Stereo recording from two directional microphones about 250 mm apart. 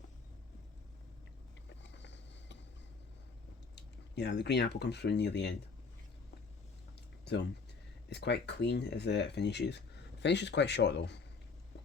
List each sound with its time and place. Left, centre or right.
1.7 s a sound: left
3.8 s speech: left
8.1 s speech: left